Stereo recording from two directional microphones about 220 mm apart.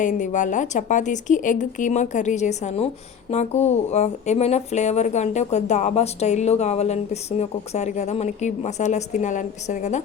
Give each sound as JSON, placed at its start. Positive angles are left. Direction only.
{"t": 0.0, "sound": "speech", "side_deg": 35}